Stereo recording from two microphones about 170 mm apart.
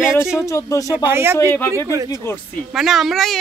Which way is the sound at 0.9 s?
10° right (ahead or behind).